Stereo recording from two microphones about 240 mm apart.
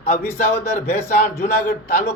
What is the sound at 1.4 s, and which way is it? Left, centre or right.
Speech, left.